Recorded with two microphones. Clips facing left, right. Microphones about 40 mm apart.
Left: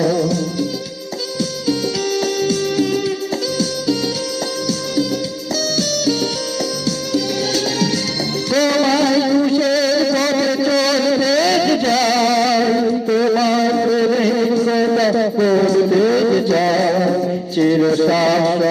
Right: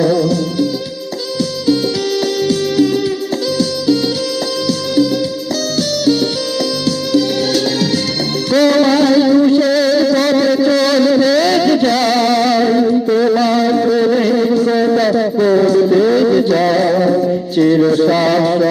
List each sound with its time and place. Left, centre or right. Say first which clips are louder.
0.0 s music: right 4 dB; right
6.8 s music: right 7 dB; right
12.8 s music: right 4 dB; centre
13.4 s a sound: right 3 dB; right
13.7 s music: right 3 dB; right
14.5 s a sound: right 3 dB; right
15.1 s a sound: right 3 dB; centre
16.3 s music: right 3 dB; right
16.9 s music: right 4 dB; centre
18.1 s mantra: right 2 dB; right